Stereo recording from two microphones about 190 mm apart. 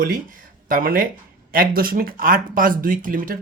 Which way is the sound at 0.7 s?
50° right (ahead or behind).